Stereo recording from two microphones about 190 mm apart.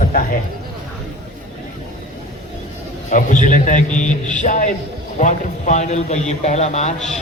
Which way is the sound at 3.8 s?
5° left (ahead or behind).